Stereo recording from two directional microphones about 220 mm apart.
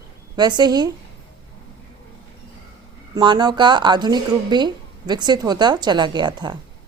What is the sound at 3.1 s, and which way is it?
Speech, 20° right (ahead or behind).